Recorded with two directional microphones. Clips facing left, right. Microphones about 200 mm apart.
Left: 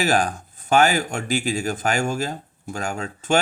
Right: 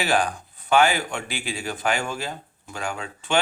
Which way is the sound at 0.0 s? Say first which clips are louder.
Left 2 dB; 45° left (ahead or behind).